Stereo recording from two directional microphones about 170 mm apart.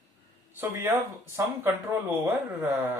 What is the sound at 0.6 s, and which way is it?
Speech, 15° right (ahead or behind).